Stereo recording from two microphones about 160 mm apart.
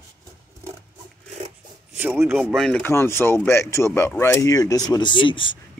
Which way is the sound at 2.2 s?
10° right (ahead or behind).